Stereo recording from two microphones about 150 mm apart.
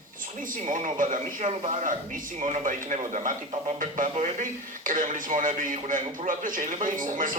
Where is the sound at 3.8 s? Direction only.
60° right (ahead or behind).